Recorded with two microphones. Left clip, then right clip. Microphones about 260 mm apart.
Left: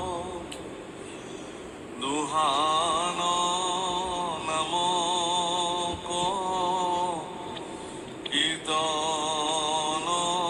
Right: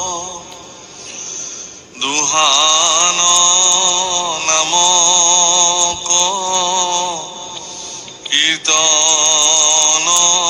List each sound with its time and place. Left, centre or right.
2.0 s mantra: right
8.3 s mantra: right